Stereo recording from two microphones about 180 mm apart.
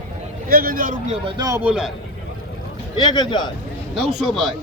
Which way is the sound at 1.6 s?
5° right (ahead or behind).